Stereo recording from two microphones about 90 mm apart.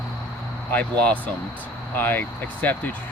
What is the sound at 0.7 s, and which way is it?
Speech, 15° left (ahead or behind).